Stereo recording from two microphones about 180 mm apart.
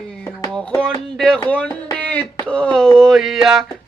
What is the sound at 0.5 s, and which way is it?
Music, 5° left (ahead or behind).